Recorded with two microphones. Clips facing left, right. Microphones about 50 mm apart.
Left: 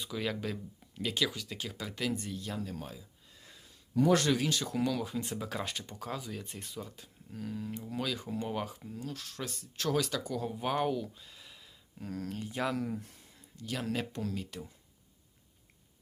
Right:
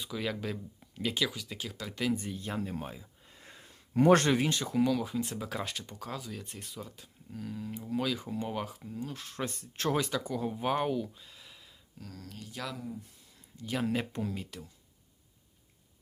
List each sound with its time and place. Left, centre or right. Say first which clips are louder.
0.0 s speech: even; centre
2.6 s a sound: right 3 dB; right
4.3 s speech: right 2 dB; right
4.6 s speech: right 4 dB; centre
9.0 s speech: right 2 dB; centre
9.2 s speech: right 4 dB; right
10.1 s speech: right 2 dB; centre
11.9 s speech: left 8 dB; left
12.7 s speech: left 6 dB; left
13.6 s speech: right 3 dB; centre